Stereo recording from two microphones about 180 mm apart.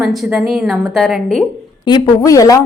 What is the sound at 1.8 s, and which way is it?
Speech, 25° left (ahead or behind).